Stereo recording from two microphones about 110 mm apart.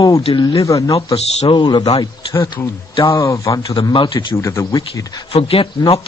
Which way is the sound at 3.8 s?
50° left (ahead or behind).